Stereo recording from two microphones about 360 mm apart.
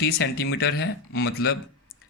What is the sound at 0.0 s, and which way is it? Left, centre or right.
Speech, left.